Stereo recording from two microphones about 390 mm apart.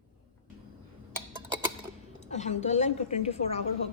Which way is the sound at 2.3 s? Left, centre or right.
Centre.